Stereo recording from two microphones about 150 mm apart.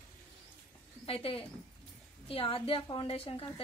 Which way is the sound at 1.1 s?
40° left (ahead or behind).